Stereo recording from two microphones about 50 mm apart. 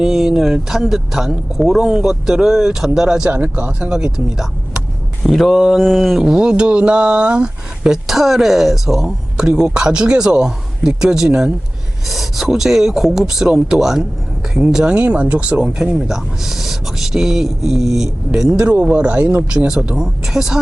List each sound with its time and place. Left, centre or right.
0.0 s speech: centre
3.2 s speech: right; by 4.4 s centre
5.3 s a sound: centre
6.2 s speech: centre
8.0 s speech: centre
12.0 s speech: centre
14.9 s speech: right
16.0 s speech: centre
18.6 s speech: right; by 20.6 s centre